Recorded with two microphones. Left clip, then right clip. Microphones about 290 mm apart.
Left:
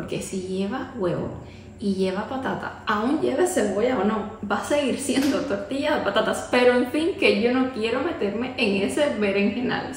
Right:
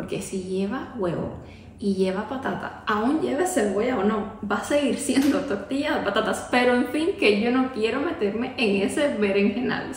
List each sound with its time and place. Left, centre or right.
0.1 s a woman's voice: centre